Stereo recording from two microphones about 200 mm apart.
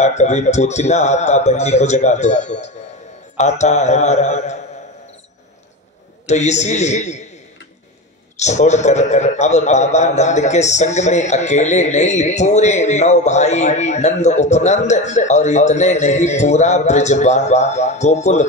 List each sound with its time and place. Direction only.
0.0 s a man's voice: 35° left (ahead or behind)
6.2 s a man's voice: 35° left (ahead or behind)
8.4 s a man's voice: 35° left (ahead or behind)